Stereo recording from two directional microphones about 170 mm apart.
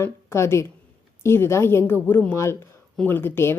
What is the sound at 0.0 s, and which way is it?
A woman's voice, 15° left (ahead or behind).